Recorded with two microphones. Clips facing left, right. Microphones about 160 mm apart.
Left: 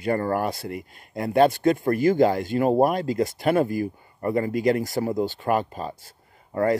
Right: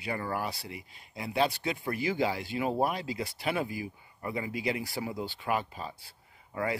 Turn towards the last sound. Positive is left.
turn(degrees=45)  # may be behind; listen again after turning